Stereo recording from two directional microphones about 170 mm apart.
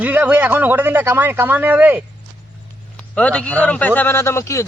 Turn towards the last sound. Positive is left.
turn(degrees=15)  # may be behind; listen again after turning